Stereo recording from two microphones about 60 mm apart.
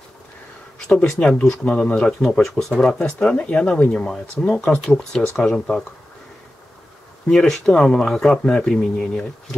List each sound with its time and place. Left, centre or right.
0.7 s speech: centre
3.0 s speech: centre
7.2 s speech: centre